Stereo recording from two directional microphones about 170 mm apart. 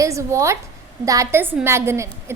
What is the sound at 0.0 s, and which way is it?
A woman's voice, 20° right (ahead or behind).